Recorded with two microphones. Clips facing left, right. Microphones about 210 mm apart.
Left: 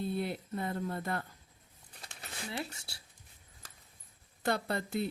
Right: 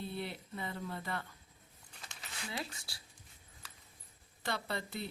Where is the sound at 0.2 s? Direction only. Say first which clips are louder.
Left 6 dB; 45° left (ahead or behind).